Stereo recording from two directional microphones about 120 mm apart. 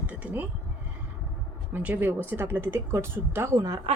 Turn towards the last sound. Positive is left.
turn(degrees=-20)  # may be behind; listen again after turning